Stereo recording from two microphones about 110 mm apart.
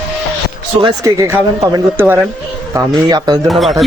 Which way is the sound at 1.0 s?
30° right (ahead or behind).